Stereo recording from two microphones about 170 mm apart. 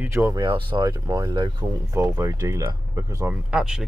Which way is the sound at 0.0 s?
15° right (ahead or behind).